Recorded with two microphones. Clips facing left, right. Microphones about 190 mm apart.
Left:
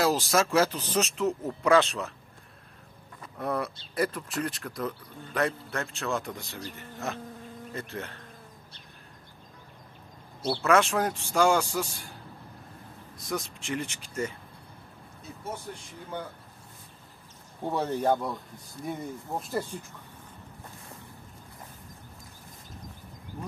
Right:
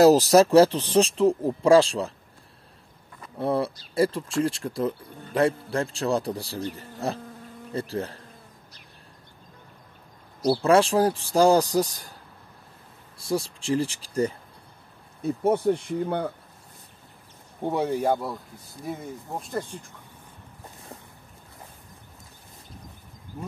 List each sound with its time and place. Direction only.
0.3 s speech: 35° right (ahead or behind)
3.3 s speech: 30° right (ahead or behind)
10.6 s speech: 30° right (ahead or behind)
13.2 s speech: 30° right (ahead or behind)
15.2 s speech: 60° right (ahead or behind)
17.6 s speech: 15° right (ahead or behind); by 19.6 s 5° left (ahead or behind)